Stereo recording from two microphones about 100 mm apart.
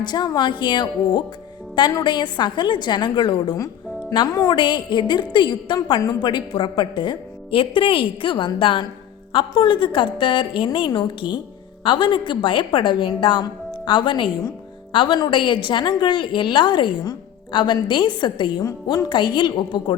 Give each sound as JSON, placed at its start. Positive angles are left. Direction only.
{"t": 0.0, "sound": "a woman's voice", "side_deg": 45}